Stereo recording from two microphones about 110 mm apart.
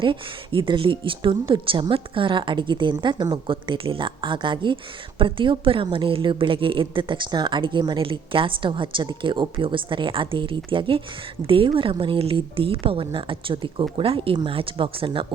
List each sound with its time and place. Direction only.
0.0 s speech: 50° right (ahead or behind)
3.5 s speech: 50° right (ahead or behind)